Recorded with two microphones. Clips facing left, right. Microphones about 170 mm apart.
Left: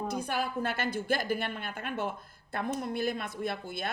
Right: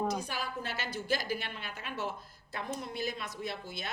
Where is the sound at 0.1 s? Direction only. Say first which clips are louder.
Left 4 dB; 55° left (ahead or behind).